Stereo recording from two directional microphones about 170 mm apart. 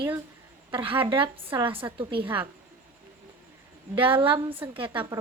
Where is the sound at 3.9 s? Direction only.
30° right (ahead or behind).